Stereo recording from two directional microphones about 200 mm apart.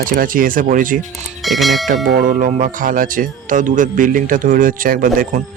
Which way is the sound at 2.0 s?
40° right (ahead or behind).